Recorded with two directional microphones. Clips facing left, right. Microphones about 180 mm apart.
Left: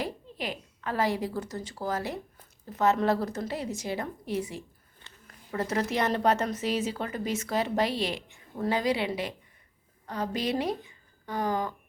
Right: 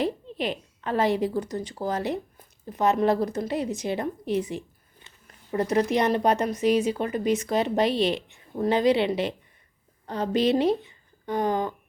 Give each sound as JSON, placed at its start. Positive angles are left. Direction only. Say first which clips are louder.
{"t": 0.0, "sound": "a woman's voice", "louder": "right 7 dB", "side_deg": -25}